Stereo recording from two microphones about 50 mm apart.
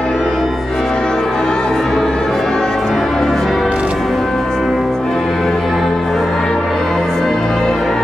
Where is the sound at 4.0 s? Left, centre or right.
Centre.